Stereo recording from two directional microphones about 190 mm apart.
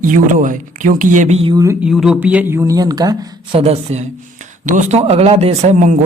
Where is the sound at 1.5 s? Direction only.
15° right (ahead or behind).